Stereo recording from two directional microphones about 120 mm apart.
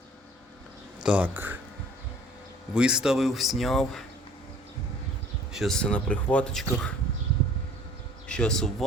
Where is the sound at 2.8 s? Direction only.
5° right (ahead or behind).